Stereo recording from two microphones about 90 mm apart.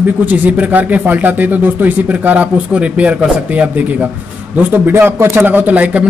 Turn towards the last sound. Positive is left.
turn(degrees=-15)  # may be behind; listen again after turning